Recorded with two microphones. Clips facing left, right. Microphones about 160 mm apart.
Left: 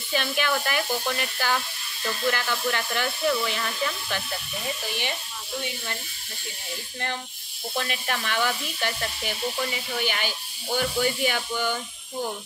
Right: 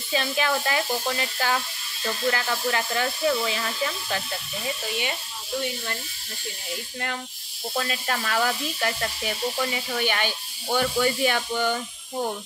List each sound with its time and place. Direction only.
0.1 s speech: 35° right (ahead or behind)
7.7 s speech: 40° right (ahead or behind)